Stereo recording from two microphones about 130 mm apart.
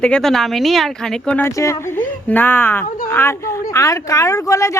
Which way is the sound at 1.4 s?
25° left (ahead or behind).